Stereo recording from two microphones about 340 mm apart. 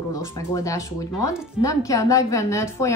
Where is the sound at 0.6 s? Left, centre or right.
Centre.